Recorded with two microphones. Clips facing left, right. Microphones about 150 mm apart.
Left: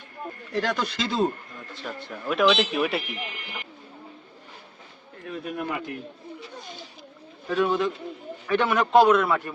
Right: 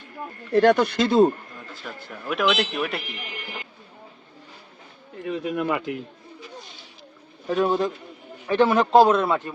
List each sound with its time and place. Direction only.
0.5 s speech: 55° right (ahead or behind)
2.0 s speech: centre (ahead or behind)
5.2 s speech: 90° right
7.5 s a man's voice: 35° right (ahead or behind)